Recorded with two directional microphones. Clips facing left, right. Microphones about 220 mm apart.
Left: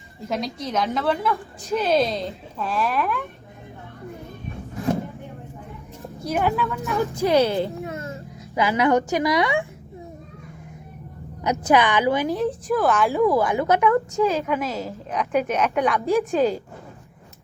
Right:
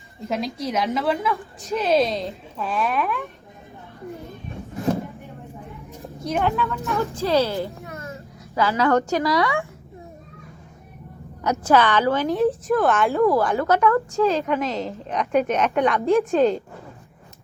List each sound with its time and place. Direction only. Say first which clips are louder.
0.3 s a woman's voice: right 1 dB; centre (ahead or behind)
6.2 s a woman's voice: even; 5° left (ahead or behind)
7.0 s a woman's voice: left 2 dB; 15° left (ahead or behind)
7.9 s a sound: left 3 dB; 30° left (ahead or behind)
8.5 s a woman's voice: even; 15° left (ahead or behind)
11.4 s a woman's voice: right 1 dB; 15° left (ahead or behind)
12.3 s a woman's voice: right 3 dB; centre (ahead or behind)